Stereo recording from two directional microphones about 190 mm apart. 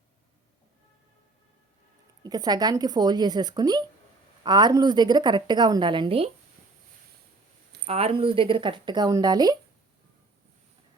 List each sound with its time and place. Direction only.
2.2 s a woman's voice: 20° right (ahead or behind)
7.9 s a woman's voice: 30° right (ahead or behind)